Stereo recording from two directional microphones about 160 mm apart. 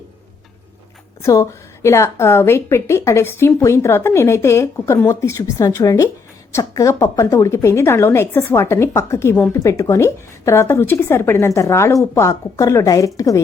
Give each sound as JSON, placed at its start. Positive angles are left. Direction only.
{"t": 1.2, "sound": "a woman's voice", "side_deg": 20}